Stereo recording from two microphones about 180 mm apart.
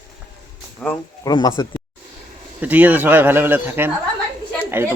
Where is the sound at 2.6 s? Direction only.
10° right (ahead or behind).